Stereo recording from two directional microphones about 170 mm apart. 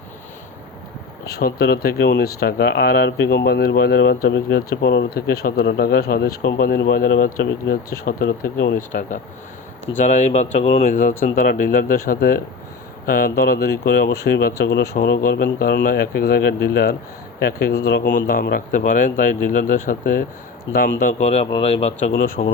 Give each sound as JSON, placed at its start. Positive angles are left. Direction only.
{"t": 1.3, "sound": "speech", "side_deg": 65}
{"t": 8.0, "sound": "speech", "side_deg": 60}
{"t": 9.0, "sound": "speech", "side_deg": 50}
{"t": 20.7, "sound": "speech", "side_deg": 65}
{"t": 22.4, "sound": "speech", "side_deg": 45}